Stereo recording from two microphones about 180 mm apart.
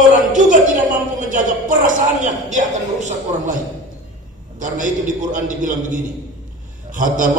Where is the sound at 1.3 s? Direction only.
45° right (ahead or behind).